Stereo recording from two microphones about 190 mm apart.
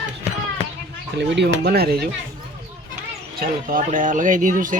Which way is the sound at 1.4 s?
55° right (ahead or behind).